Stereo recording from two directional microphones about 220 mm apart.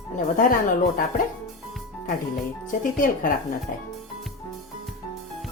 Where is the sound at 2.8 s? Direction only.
40° left (ahead or behind).